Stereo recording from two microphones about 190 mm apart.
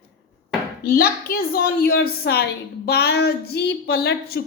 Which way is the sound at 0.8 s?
55° left (ahead or behind).